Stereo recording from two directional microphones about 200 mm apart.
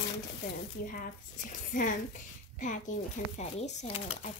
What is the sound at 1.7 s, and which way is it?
A woman's voice, 45° left (ahead or behind).